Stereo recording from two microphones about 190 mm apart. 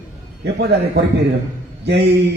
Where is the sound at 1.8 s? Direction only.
60° right (ahead or behind).